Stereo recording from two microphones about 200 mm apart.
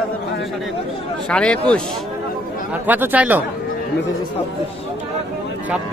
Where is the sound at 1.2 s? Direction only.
5° left (ahead or behind).